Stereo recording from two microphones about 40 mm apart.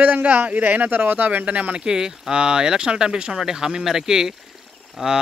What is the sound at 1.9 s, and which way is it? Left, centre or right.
Speech, centre.